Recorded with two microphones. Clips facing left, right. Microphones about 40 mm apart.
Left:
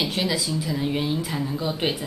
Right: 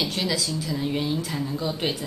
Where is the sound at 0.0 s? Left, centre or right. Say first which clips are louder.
Left 1 dB; centre.